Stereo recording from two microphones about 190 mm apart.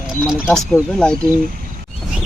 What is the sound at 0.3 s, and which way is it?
Speech, centre (ahead or behind).